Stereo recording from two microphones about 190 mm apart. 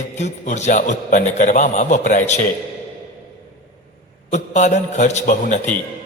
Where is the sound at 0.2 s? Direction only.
40° left (ahead or behind).